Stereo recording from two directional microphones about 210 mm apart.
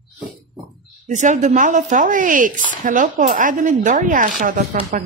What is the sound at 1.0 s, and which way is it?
Speech, 35° right (ahead or behind).